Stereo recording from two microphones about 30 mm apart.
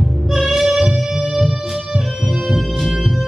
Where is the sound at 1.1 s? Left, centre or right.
Right.